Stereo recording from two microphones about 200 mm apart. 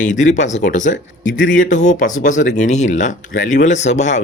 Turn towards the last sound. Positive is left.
turn(degrees=35)  # may be behind; listen again after turning